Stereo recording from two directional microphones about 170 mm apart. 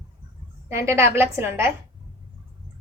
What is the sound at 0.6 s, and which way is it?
A woman's voice, 15° right (ahead or behind).